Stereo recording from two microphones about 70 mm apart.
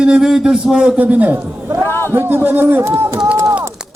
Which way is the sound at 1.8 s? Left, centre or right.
Left.